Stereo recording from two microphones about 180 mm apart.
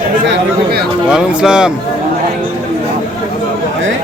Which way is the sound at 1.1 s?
5° right (ahead or behind).